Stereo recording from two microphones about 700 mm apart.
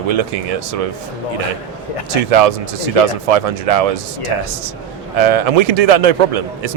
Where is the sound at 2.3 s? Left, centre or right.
Right.